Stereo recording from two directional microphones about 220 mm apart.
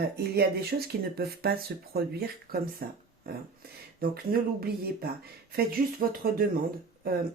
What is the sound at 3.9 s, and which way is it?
Speech, 40° right (ahead or behind).